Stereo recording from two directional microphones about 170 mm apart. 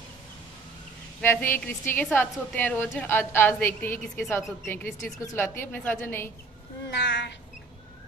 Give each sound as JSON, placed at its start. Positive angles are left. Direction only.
{"t": 1.2, "sound": "a woman's voice", "side_deg": 10}
{"t": 6.9, "sound": "speech", "side_deg": 90}